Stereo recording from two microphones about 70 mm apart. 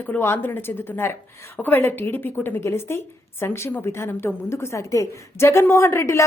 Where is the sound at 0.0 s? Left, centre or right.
Left.